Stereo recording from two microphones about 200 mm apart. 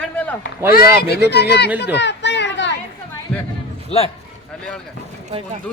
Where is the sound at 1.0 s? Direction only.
55° left (ahead or behind).